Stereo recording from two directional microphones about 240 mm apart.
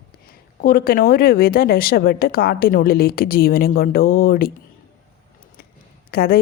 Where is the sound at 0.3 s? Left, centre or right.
Left.